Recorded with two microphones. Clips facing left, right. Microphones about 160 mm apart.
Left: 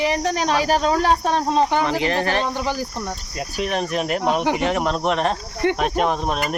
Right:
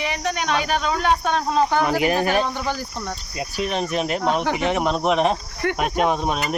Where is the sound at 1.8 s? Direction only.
10° right (ahead or behind).